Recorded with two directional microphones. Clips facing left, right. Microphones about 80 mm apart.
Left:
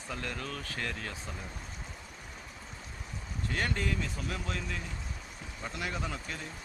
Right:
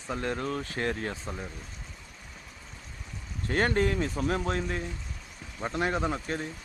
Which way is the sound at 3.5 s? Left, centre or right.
Right.